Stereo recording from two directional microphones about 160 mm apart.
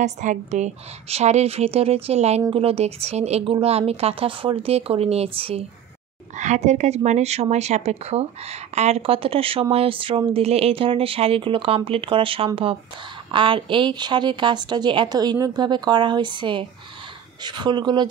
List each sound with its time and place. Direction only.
0.0 s a woman's voice: 50° right (ahead or behind); by 18.0 s 30° right (ahead or behind)